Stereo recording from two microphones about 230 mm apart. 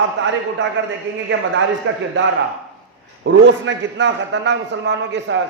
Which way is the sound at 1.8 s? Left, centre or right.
Right.